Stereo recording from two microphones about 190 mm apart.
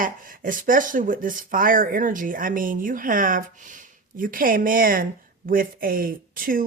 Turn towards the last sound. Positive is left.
turn(degrees=-50)  # may be behind; listen again after turning